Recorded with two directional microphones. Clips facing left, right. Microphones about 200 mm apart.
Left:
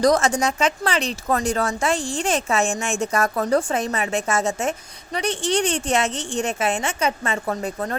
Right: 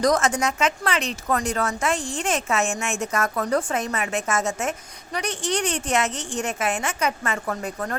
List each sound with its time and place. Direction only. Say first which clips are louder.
0.0 s a woman's voice: left 3 dB; 30° left (ahead or behind)